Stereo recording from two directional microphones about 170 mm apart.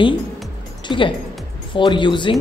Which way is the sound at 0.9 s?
30° left (ahead or behind).